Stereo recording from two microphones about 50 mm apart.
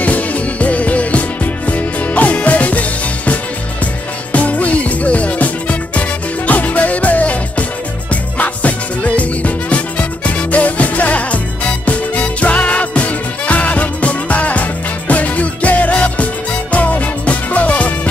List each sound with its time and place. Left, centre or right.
0.0 s music: left